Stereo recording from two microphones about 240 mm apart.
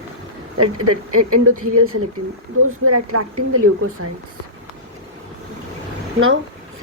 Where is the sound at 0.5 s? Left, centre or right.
Right.